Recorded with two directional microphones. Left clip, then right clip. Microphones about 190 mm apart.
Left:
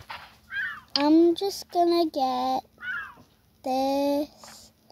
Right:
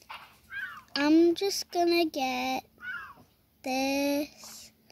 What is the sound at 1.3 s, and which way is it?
Speech, 60° right (ahead or behind).